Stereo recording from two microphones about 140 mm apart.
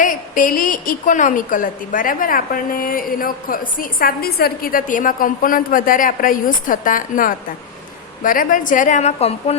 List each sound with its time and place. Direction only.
0.0 s a woman's voice: 70° left (ahead or behind); by 9.6 s 50° left (ahead or behind)